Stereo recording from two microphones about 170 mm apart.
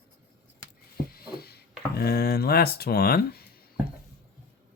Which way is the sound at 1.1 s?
65° left (ahead or behind).